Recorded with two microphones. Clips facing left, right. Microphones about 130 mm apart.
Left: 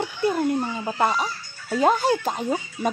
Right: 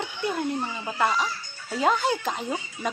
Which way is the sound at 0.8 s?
40° left (ahead or behind).